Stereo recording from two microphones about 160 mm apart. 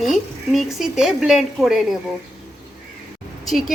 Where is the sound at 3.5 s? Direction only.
Centre (ahead or behind).